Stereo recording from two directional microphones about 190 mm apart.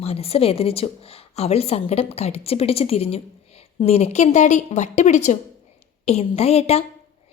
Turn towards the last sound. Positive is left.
turn(degrees=35)  # may be behind; listen again after turning